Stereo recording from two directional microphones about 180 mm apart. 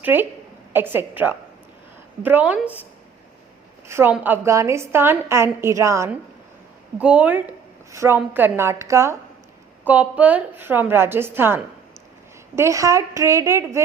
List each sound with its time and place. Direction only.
0.0 s a woman's voice: 10° right (ahead or behind)
3.8 s a woman's voice: 15° right (ahead or behind)